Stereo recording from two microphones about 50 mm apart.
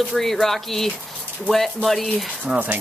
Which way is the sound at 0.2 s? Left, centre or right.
Centre.